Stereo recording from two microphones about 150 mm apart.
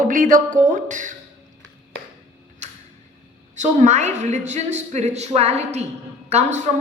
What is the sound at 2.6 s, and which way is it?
Tick-tock, 50° right (ahead or behind).